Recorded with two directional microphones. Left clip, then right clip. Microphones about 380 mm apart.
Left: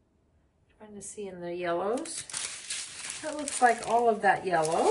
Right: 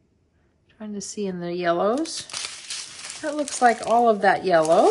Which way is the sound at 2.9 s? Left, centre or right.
Centre.